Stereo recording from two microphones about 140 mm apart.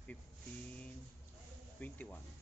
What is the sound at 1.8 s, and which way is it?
Speech, 10° left (ahead or behind).